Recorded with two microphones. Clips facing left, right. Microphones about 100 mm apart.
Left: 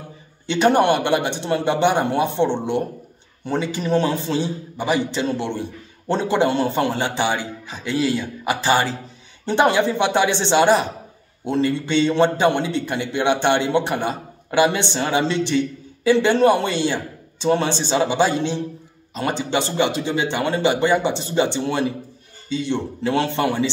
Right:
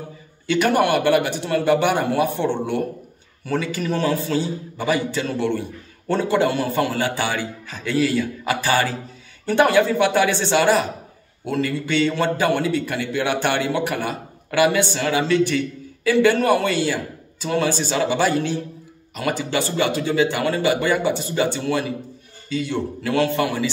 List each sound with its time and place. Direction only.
0.5 s a man's voice: 25° left (ahead or behind)